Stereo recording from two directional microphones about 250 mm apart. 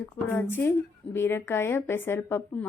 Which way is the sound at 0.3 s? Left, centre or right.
Centre.